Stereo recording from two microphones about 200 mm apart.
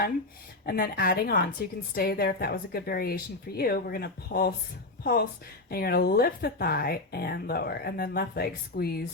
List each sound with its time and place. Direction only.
0.6 s a woman's voice: 50° left (ahead or behind)